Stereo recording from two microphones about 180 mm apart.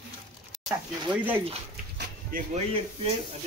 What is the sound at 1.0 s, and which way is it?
Speech, 10° right (ahead or behind).